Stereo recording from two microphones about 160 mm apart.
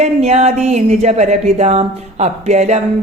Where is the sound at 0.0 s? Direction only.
45° right (ahead or behind).